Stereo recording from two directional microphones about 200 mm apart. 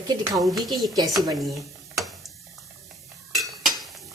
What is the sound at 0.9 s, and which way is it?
Speech, 15° right (ahead or behind).